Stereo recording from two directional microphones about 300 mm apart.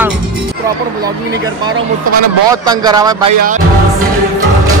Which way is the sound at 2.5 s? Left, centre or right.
Centre.